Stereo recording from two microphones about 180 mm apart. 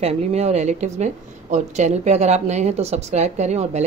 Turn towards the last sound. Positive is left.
turn(degrees=-40)  # may be behind; listen again after turning